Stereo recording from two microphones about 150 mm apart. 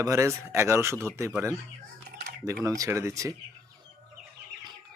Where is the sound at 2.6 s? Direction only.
20° right (ahead or behind).